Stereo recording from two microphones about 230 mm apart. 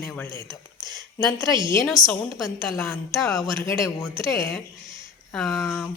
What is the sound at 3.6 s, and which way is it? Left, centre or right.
Speech, centre.